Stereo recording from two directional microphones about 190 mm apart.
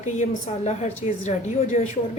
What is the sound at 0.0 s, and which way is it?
A woman's voice, 40° left (ahead or behind).